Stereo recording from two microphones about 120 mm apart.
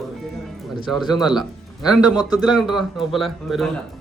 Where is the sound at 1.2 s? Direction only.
Centre (ahead or behind).